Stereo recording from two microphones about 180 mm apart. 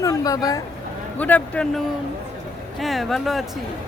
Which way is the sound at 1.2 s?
5° left (ahead or behind).